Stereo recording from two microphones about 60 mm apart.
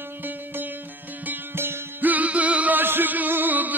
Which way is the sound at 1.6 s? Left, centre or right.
Right.